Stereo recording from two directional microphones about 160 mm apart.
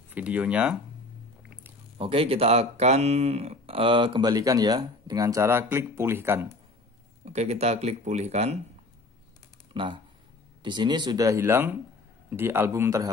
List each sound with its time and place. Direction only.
0.1 s a man's voice: 10° right (ahead or behind)
2.0 s speech: 35° right (ahead or behind); by 6.4 s 15° right (ahead or behind)
7.2 s speech: 45° right (ahead or behind)
9.7 s a man's voice: 35° right (ahead or behind); by 13.1 s 20° right (ahead or behind)